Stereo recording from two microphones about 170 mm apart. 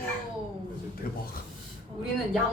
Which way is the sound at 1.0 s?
60° left (ahead or behind).